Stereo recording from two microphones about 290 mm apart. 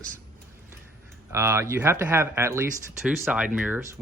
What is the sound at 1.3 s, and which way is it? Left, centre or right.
Speech, centre.